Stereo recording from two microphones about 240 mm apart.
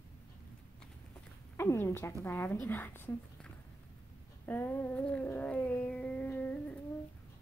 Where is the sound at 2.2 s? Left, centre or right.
Centre.